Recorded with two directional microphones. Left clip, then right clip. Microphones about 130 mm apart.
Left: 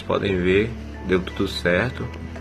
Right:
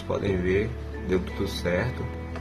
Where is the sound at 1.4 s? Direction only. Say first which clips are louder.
Left 6 dB; 15° left (ahead or behind).